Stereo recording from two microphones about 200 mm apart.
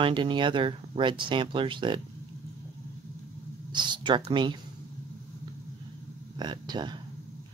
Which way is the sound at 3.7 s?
20° right (ahead or behind).